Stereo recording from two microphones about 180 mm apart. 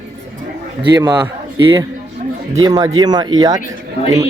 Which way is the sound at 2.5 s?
20° right (ahead or behind).